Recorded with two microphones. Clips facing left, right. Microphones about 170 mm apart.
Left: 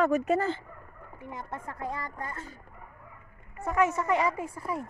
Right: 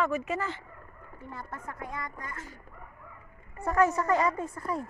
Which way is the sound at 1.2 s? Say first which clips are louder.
Left 3 dB; 20° left (ahead or behind).